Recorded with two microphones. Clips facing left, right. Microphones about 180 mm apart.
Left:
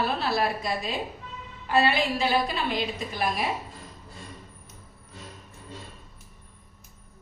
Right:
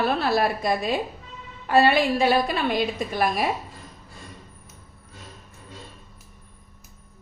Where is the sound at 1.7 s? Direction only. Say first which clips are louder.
Right 5 dB; 55° right (ahead or behind).